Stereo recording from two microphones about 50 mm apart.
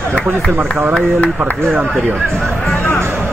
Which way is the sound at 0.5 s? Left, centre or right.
Right.